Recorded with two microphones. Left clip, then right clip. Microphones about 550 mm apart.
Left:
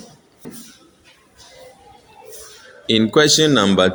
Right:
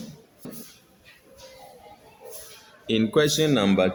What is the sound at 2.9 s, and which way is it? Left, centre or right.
Speech, right.